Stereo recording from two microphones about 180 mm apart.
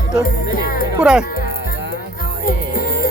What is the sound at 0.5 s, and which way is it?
Speech, 50° left (ahead or behind).